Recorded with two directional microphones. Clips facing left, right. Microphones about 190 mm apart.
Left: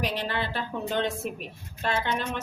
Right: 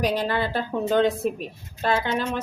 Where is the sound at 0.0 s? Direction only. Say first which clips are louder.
Right 6 dB; 40° right (ahead or behind).